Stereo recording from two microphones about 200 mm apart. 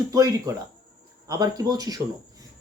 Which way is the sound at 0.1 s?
15° right (ahead or behind).